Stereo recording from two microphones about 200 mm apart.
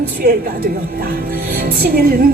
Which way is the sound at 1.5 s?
50° right (ahead or behind).